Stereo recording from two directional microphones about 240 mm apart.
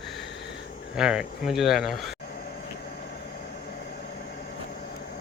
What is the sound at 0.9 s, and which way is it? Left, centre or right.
Speech, centre.